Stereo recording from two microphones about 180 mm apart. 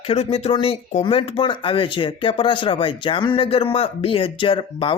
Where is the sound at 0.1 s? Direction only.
35° left (ahead or behind).